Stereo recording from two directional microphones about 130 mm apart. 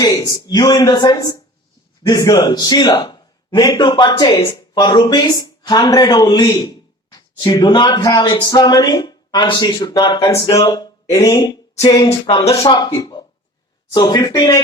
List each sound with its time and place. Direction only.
0.0 s a man's voice: 30° left (ahead or behind)
11.8 s a sound: 30° left (ahead or behind)
12.2 s a man's voice: 40° left (ahead or behind)